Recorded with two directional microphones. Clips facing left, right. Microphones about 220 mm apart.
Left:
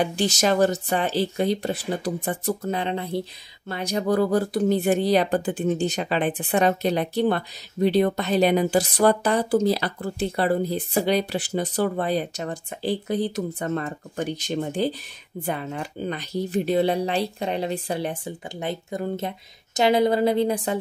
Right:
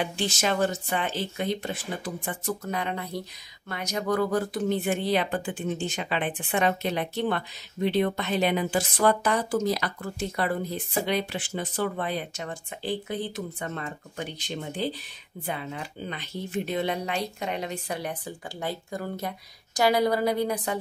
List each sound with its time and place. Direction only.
0.0 s speech: 40° left (ahead or behind)